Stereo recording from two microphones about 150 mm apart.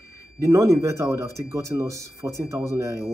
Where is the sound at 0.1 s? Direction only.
20° right (ahead or behind).